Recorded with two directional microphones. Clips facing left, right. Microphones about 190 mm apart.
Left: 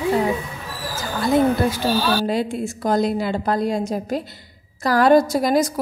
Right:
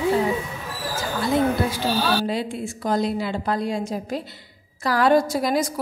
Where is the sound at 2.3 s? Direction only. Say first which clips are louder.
Left 4 dB; 45° left (ahead or behind).